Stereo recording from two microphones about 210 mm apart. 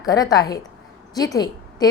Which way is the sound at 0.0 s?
15° left (ahead or behind).